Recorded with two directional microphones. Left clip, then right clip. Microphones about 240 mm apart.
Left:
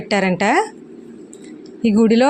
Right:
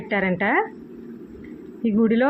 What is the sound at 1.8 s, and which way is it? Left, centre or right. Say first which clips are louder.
Speech: left 6 dB; left.